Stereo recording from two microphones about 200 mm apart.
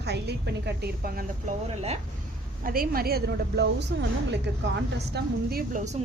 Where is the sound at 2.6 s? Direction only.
45° right (ahead or behind).